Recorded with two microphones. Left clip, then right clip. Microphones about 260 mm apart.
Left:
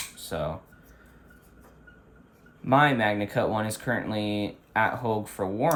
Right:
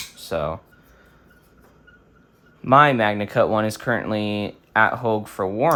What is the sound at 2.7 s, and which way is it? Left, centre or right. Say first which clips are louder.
Speech: right 7 dB; right.